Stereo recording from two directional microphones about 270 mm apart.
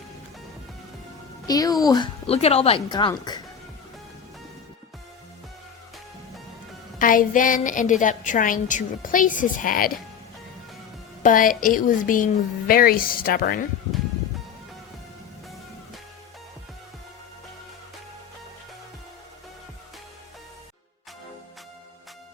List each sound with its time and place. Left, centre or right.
1.5 s a woman's voice: centre
7.0 s a woman's voice: left
11.2 s a woman's voice: left